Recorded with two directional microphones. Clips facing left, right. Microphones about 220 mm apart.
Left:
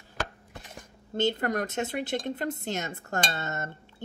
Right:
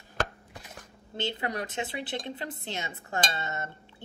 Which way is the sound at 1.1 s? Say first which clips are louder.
Left 6 dB; 45° left (ahead or behind).